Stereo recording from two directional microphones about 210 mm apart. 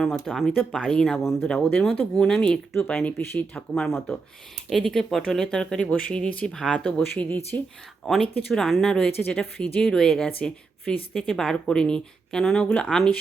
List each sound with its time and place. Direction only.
0.0 s a woman's voice: centre (ahead or behind)